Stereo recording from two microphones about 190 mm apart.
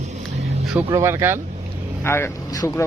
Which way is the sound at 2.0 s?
15° left (ahead or behind).